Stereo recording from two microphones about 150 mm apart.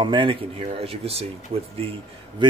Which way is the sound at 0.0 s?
35° right (ahead or behind).